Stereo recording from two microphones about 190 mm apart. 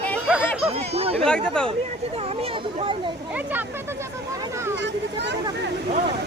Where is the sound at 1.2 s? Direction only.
5° left (ahead or behind).